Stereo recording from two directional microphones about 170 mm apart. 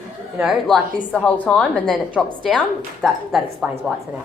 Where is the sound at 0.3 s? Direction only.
5° right (ahead or behind).